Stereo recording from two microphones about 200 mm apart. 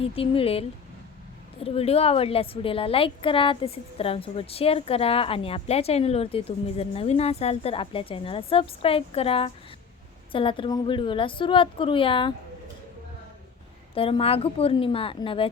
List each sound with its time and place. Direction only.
0.0 s a woman's voice: 30° left (ahead or behind)
1.6 s a woman's voice: 30° left (ahead or behind)
13.9 s a woman's voice: 30° left (ahead or behind)